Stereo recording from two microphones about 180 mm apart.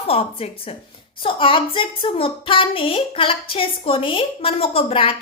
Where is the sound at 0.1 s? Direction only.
35° left (ahead or behind).